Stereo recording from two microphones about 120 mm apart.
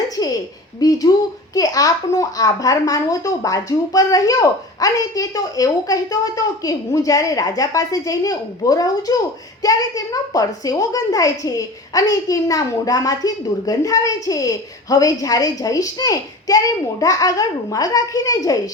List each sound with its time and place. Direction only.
0.8 s a child's voice: 30° left (ahead or behind)